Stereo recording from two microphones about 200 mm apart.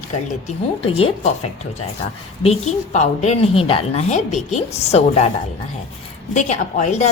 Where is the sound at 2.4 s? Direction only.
30° left (ahead or behind).